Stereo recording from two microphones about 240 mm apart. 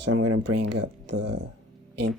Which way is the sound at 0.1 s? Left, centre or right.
Right.